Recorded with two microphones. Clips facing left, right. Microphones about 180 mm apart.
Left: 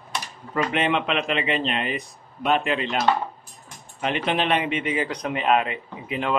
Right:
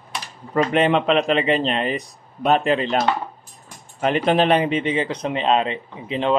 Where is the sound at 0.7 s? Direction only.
40° right (ahead or behind).